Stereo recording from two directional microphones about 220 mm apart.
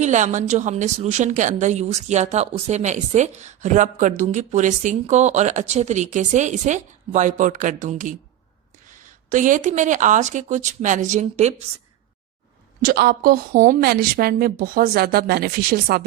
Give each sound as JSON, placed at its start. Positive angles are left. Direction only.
{"t": 0.0, "sound": "a woman's voice", "side_deg": -35}
{"t": 9.3, "sound": "a woman's voice", "side_deg": -35}
{"t": 12.8, "sound": "a woman's voice", "side_deg": -45}